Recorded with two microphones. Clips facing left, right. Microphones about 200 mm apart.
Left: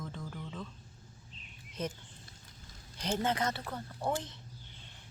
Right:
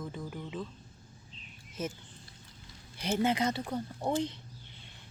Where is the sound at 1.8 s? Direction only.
5° right (ahead or behind).